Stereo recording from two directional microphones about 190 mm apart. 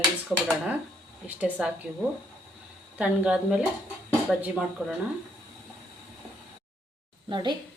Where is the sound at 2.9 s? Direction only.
5° right (ahead or behind).